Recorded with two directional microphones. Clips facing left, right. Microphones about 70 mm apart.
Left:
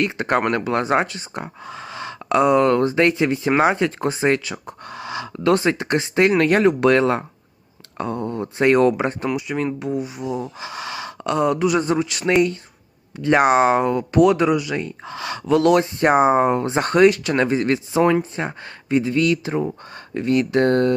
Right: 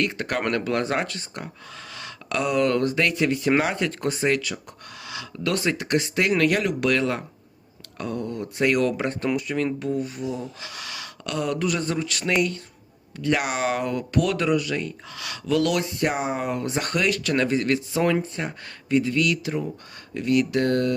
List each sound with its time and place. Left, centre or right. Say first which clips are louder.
0.0 s speech: left 5 dB; left